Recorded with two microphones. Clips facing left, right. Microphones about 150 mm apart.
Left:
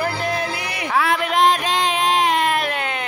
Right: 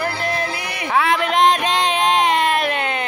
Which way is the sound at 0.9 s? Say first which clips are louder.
Right 2 dB; centre (ahead or behind).